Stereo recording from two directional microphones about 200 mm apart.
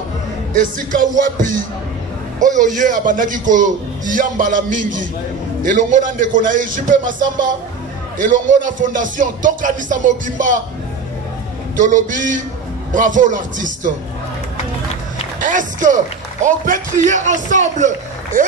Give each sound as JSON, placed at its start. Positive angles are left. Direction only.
{"t": 0.5, "sound": "a man's voice", "side_deg": -40}
{"t": 2.4, "sound": "a man's voice", "side_deg": -40}
{"t": 11.8, "sound": "a man's voice", "side_deg": -40}
{"t": 15.4, "sound": "a man's voice", "side_deg": -40}